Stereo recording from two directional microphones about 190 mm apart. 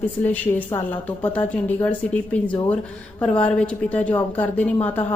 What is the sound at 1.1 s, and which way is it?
Speech, 10° left (ahead or behind).